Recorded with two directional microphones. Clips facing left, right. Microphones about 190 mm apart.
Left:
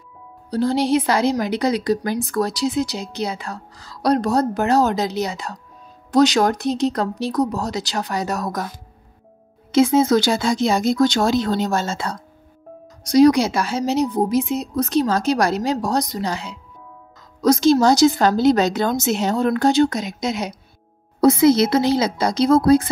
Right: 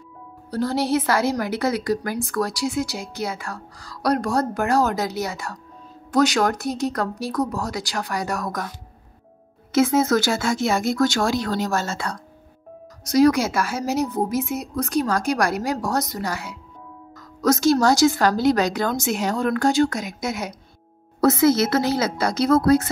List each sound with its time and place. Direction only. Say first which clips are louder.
0.5 s a woman's voice: left 3 dB; 15° left (ahead or behind)
10.0 s a woman's voice: left 3 dB; 20° left (ahead or behind)